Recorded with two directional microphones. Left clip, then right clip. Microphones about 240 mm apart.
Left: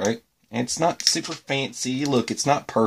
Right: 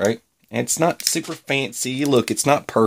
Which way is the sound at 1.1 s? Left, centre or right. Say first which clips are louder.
Right 3 dB; right.